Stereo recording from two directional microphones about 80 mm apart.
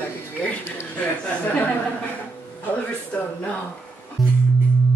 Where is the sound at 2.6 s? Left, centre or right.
Centre.